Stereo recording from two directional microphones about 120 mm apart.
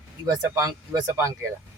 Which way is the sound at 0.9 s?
15° right (ahead or behind).